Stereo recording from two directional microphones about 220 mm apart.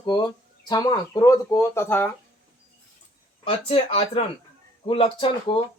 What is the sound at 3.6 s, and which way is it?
Speech, 25° left (ahead or behind).